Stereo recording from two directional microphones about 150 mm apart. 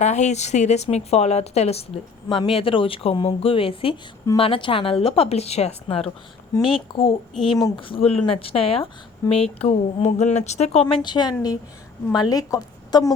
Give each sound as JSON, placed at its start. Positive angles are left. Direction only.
{"t": 0.0, "sound": "a woman's voice", "side_deg": 50}